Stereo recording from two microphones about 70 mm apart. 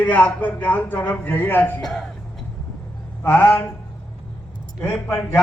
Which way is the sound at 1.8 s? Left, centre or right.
Centre.